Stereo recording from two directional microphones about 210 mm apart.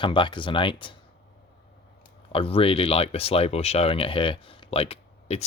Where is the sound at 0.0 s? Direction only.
25° left (ahead or behind).